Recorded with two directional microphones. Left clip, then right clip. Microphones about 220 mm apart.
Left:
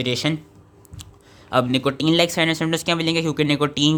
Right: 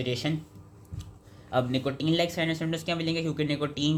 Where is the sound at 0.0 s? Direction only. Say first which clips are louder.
Left 8 dB; 35° left (ahead or behind).